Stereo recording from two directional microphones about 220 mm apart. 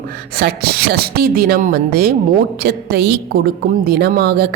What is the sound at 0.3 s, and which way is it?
A woman's voice, 45° right (ahead or behind).